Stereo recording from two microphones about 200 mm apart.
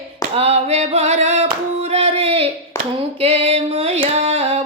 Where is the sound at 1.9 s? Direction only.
30° right (ahead or behind).